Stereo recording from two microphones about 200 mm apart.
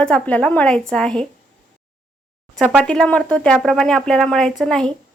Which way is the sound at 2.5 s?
Centre (ahead or behind).